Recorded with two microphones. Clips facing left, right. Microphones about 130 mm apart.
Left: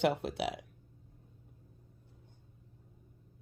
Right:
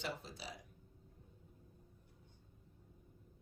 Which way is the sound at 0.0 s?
65° left (ahead or behind).